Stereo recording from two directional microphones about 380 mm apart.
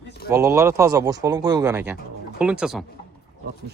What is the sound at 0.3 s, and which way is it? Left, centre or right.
Speech, centre.